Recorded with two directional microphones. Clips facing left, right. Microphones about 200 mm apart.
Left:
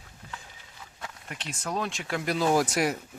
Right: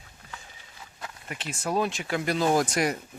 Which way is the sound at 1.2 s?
5° right (ahead or behind).